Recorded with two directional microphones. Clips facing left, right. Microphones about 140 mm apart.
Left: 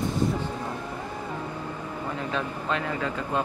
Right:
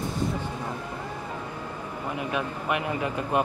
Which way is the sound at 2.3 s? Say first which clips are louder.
Right 1 dB; 15° right (ahead or behind).